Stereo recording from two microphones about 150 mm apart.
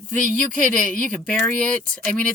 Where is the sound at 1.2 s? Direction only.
10° left (ahead or behind).